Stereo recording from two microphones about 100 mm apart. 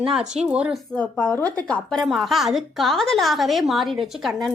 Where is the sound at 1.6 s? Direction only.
5° left (ahead or behind).